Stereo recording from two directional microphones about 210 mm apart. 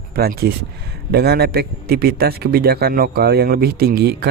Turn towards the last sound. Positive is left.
turn(degrees=-50)  # may be behind; listen again after turning